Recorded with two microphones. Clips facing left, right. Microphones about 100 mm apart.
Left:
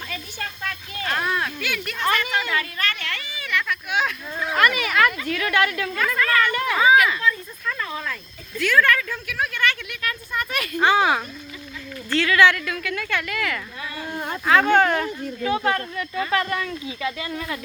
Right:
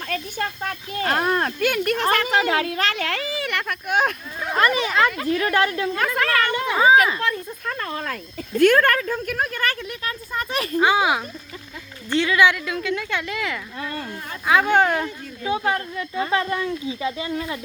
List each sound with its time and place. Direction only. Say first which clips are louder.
0.1 s speech: right 6 dB; 45° right (ahead or behind)
2.6 s speech: right 4 dB; 90° right; by 4.5 s 50° right (ahead or behind)
4.5 s a woman's voice: right 1 dB; 30° right (ahead or behind)
6.1 s speech: left 1 dB; 75° right (ahead or behind)
6.5 s speech: right 1 dB; 20° right (ahead or behind)
6.8 s a woman's voice: right 1 dB; 35° right (ahead or behind)
7.6 s speech: left 2 dB; 45° right (ahead or behind)
10.8 s speech: even; 10° right (ahead or behind)